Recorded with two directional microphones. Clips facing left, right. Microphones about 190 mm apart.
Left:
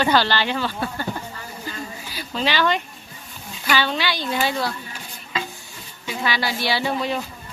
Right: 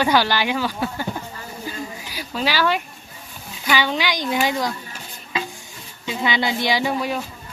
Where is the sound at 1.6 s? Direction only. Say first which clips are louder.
Right 2 dB; 10° right (ahead or behind).